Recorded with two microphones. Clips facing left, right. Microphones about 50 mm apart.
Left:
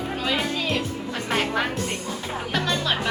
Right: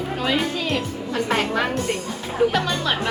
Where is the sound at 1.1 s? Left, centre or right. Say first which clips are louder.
Right 4 dB; centre.